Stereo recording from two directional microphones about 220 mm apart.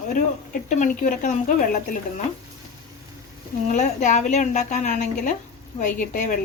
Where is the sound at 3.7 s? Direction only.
35° left (ahead or behind).